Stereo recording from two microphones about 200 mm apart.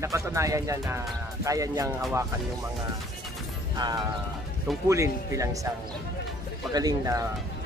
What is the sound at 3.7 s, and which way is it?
Speech, 20° right (ahead or behind).